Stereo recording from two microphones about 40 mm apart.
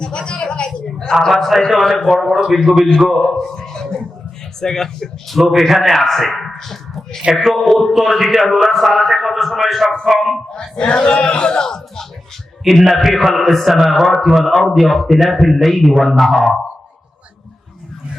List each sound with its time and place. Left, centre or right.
0.0 s a sound: left
1.3 s a man's voice: centre
3.5 s a sound: centre
4.6 s speech: centre
5.4 s a man's voice: centre
10.5 s a man's voice: left
12.6 s a man's voice: centre